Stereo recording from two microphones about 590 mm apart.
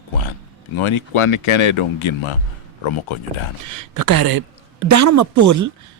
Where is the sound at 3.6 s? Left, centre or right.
Right.